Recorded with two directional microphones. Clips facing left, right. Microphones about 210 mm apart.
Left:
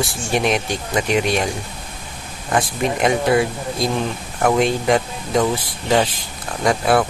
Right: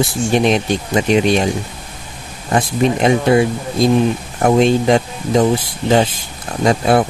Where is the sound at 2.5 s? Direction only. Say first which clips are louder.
Right 5 dB; 25° right (ahead or behind).